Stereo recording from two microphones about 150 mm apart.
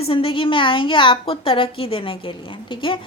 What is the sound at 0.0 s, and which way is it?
A woman's voice, 40° left (ahead or behind).